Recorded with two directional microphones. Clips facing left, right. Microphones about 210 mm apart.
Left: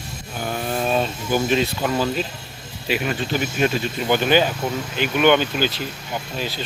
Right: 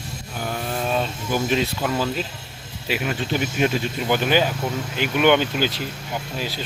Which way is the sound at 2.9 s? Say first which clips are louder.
Left 1 dB; 5° right (ahead or behind).